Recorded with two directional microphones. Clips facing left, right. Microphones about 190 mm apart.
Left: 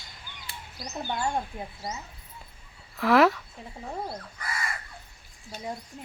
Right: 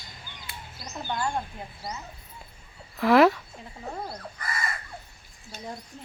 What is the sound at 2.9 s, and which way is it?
Speech, centre (ahead or behind).